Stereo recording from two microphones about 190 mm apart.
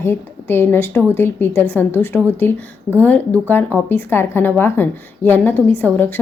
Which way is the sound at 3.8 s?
10° left (ahead or behind).